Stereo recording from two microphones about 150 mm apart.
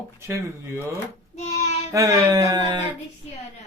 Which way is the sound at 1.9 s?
20° right (ahead or behind).